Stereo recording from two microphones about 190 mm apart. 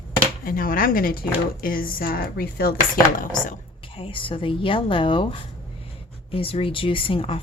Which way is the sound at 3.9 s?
30° left (ahead or behind).